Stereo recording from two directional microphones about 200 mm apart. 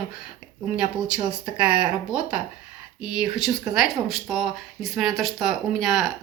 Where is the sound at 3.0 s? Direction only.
5° right (ahead or behind).